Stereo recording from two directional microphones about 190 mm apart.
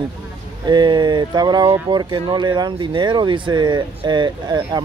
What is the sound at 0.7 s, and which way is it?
Speech, 25° right (ahead or behind).